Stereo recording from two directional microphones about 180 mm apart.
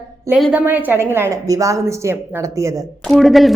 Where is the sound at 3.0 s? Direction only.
Centre (ahead or behind).